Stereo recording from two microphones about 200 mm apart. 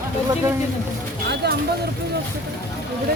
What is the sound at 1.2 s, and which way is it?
Vehicle, 55° right (ahead or behind).